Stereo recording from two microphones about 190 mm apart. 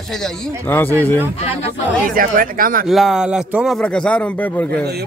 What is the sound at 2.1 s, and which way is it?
Speech, 45° right (ahead or behind).